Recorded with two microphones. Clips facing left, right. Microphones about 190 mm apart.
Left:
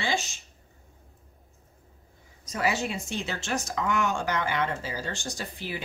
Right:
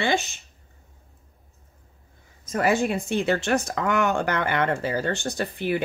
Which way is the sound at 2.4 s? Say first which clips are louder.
Right 6 dB; 50° right (ahead or behind).